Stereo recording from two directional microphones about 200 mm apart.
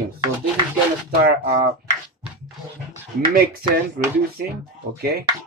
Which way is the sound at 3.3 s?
50° right (ahead or behind).